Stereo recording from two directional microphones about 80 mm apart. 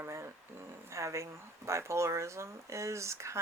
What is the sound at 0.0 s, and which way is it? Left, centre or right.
Speech, right.